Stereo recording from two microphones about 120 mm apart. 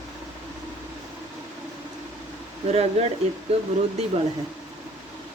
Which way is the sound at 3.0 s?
60° right (ahead or behind).